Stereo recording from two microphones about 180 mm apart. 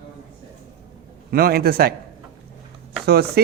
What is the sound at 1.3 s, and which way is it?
Speech, 60° right (ahead or behind).